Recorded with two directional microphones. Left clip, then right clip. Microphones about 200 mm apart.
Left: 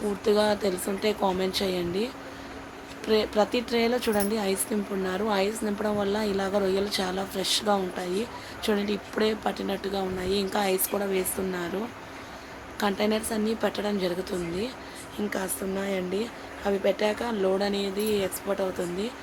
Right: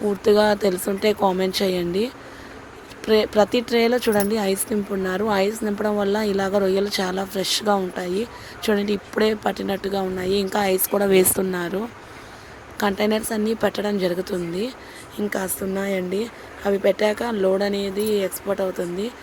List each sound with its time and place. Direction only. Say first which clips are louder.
0.3 s speech: right 6 dB; 40° right (ahead or behind)
12.7 s speech: right 5 dB; 35° right (ahead or behind)